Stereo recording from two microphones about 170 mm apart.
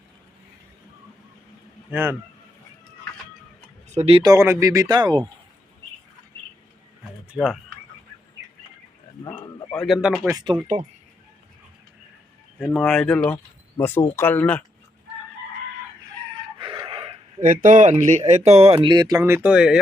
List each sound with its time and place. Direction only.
1.9 s a man's voice: 15° right (ahead or behind)
3.8 s speech: 40° right (ahead or behind)
4.2 s speech: 20° right (ahead or behind)
7.3 s speech: centre (ahead or behind)
9.2 s a sound: 25° left (ahead or behind)
9.7 s speech: centre (ahead or behind)
10.2 s speech: 20° right (ahead or behind)
12.5 s speech: centre (ahead or behind)
16.7 s a sound: 30° right (ahead or behind)
17.4 s speech: 50° right (ahead or behind); by 19.8 s 5° right (ahead or behind)